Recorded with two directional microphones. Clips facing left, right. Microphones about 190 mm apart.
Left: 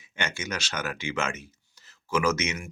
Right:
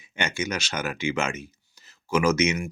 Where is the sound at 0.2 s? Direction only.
15° right (ahead or behind).